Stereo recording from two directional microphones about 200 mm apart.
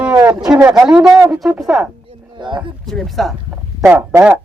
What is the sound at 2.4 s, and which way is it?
Speech, 25° right (ahead or behind).